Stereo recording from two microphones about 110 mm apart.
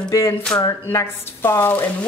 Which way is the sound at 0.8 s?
20° left (ahead or behind).